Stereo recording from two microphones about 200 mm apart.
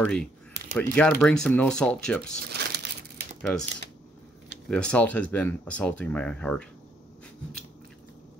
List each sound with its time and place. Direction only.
0.0 s speech: 5° left (ahead or behind)
2.5 s crumpling: 55° right (ahead or behind)
4.6 s speech: 5° left (ahead or behind)